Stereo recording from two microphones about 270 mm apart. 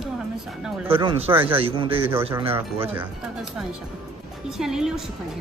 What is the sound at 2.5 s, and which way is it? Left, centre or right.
Speech, centre.